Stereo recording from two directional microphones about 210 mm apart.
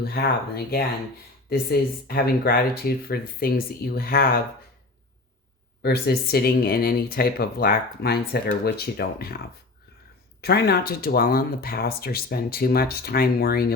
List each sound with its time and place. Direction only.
0.0 s speech: 50° left (ahead or behind)
5.8 s speech: 50° left (ahead or behind)
10.4 s speech: 50° left (ahead or behind)